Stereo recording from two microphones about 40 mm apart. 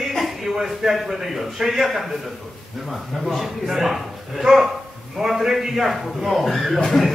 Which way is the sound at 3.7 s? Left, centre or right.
Centre.